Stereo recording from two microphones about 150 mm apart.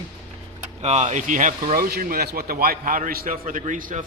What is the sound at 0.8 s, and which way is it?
Speech, 50° right (ahead or behind).